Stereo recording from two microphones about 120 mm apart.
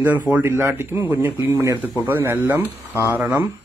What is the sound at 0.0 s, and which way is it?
Speech, 15° right (ahead or behind).